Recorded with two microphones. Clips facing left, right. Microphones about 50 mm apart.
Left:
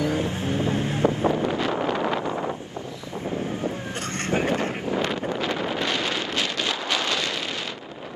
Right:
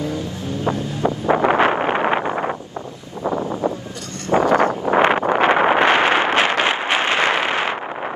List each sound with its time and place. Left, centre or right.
0.0 s music: left
0.7 s wind noise: left
1.3 s wind noise: right
1.6 s wind noise: right
3.3 s wind: right
4.3 s wind noise: right